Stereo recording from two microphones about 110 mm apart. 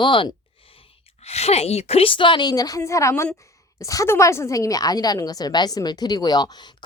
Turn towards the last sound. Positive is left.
turn(degrees=40)  # may be behind; listen again after turning